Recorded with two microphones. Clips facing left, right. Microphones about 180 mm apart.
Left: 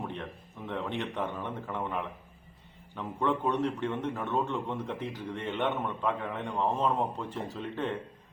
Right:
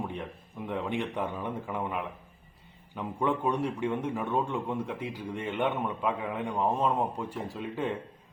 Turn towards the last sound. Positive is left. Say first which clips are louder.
# right 1 dB
turn(degrees=-10)  # may be behind; listen again after turning